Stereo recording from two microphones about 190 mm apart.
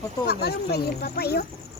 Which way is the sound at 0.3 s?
55° left (ahead or behind).